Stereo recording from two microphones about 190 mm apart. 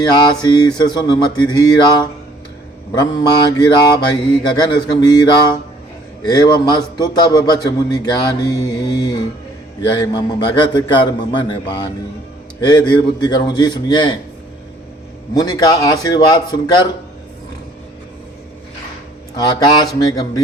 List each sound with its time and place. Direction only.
0.1 s a man's voice: 20° left (ahead or behind)
15.4 s a man's voice: 20° left (ahead or behind)
19.4 s a man's voice: 20° left (ahead or behind)